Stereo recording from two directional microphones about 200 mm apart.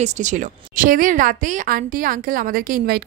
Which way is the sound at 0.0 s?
35° right (ahead or behind).